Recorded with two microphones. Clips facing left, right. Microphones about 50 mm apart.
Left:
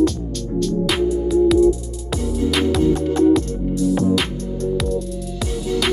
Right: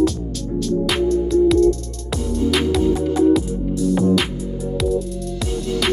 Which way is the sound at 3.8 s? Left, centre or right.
Centre.